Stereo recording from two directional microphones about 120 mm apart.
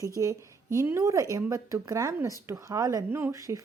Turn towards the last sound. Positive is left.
turn(degrees=-25)  # may be behind; listen again after turning